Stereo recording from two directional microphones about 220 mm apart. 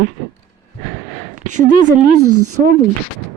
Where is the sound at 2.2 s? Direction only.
90° right.